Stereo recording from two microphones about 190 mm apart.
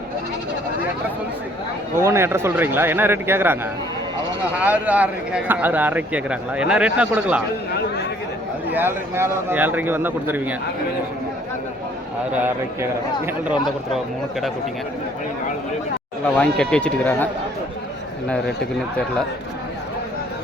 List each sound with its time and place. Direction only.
2.0 s speech: 15° right (ahead or behind)
4.6 s speech: 5° right (ahead or behind)
8.7 s speech: 10° right (ahead or behind)
12.3 s speech: 10° right (ahead or behind)
16.4 s speech: 5° left (ahead or behind)